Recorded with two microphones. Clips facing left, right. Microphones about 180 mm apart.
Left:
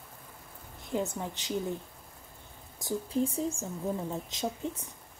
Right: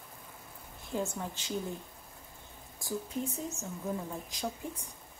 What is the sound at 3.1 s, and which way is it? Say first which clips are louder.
Speech: left 7 dB; 30° left (ahead or behind).